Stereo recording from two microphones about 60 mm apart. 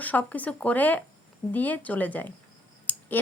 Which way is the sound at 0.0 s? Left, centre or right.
Left.